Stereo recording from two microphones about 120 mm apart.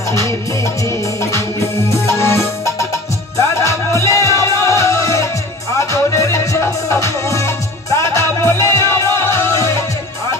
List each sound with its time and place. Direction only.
0.6 s music: 25° left (ahead or behind)